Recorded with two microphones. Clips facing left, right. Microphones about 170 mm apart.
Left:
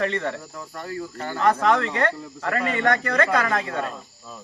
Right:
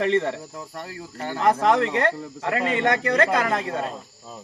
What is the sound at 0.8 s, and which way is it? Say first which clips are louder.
Speech: left 4 dB; 30° right (ahead or behind).